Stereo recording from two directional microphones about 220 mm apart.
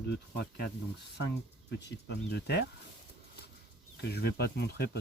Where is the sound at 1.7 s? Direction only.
50° left (ahead or behind).